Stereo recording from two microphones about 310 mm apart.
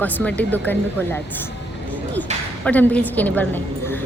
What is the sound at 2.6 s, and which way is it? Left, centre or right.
A woman's voice, centre.